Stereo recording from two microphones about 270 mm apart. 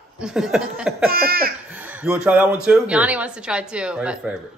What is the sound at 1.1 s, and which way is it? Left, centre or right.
Laughter, right.